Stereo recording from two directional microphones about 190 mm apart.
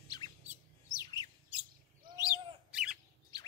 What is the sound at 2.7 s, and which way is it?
Bird, 5° right (ahead or behind).